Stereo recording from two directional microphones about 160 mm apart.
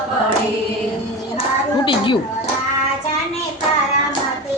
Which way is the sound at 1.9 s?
30° left (ahead or behind).